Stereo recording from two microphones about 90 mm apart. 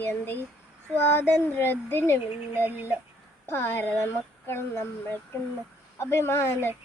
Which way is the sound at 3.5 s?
25° left (ahead or behind).